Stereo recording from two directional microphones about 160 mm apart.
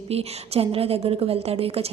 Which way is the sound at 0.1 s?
40° right (ahead or behind).